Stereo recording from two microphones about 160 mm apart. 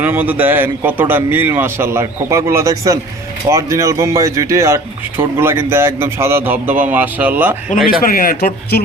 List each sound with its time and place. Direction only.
0.0 s speech: 10° right (ahead or behind)
7.9 s speech: 65° left (ahead or behind)